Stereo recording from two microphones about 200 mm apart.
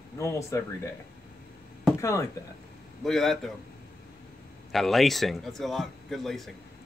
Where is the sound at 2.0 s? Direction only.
15° left (ahead or behind).